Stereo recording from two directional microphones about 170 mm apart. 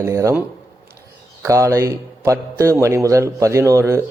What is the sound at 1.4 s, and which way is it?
A man's voice, 20° right (ahead or behind).